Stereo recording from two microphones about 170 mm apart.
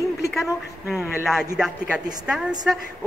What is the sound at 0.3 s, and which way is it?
A woman's voice, centre (ahead or behind).